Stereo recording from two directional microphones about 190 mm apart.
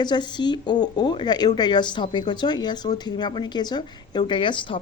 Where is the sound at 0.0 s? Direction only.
25° left (ahead or behind).